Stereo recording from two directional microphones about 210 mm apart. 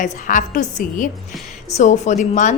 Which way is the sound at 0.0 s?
35° left (ahead or behind).